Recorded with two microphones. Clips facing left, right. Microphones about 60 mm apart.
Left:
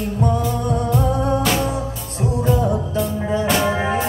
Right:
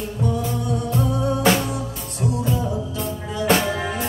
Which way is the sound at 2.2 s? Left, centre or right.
Left.